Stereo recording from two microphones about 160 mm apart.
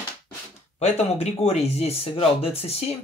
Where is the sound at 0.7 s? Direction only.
45° left (ahead or behind).